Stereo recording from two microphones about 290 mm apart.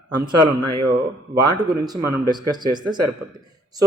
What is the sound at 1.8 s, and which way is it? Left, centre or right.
Speech, centre.